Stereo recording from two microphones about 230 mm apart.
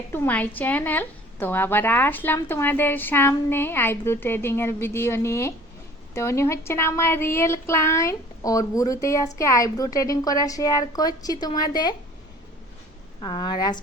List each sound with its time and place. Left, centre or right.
0.1 s a woman's voice: centre
13.2 s a woman's voice: centre